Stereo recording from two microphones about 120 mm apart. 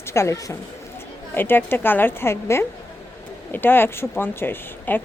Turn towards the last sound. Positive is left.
turn(degrees=15)  # may be behind; listen again after turning